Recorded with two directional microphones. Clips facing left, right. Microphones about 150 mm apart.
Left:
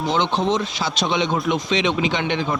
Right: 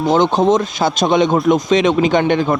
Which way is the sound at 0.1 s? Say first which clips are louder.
Right 8 dB; 45° right (ahead or behind).